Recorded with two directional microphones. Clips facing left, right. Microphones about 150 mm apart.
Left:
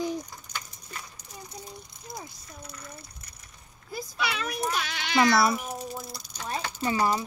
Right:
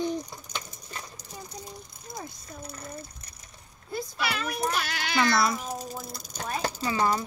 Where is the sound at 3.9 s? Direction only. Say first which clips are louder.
Right 1 dB; centre (ahead or behind).